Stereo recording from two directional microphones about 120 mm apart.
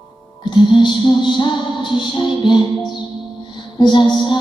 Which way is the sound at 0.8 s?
40° left (ahead or behind).